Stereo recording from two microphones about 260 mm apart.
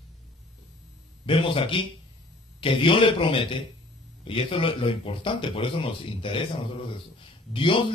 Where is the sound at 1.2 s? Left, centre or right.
Centre.